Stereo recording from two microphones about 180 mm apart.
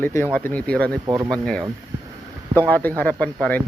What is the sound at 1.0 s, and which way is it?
Speech, 20° right (ahead or behind).